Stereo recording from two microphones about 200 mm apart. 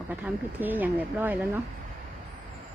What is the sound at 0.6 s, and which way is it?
Speech, 10° right (ahead or behind).